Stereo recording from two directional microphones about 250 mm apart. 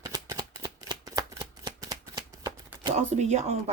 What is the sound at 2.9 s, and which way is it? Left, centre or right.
Speech, right.